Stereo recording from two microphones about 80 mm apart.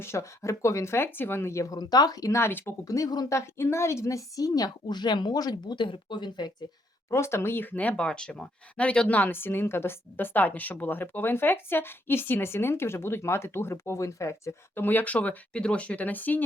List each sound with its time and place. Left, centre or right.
0.0 s speech: left
1.7 s a woman's voice: left
2.4 s speech: left
2.8 s a woman's voice: left
7.1 s speech: left
14.8 s speech: left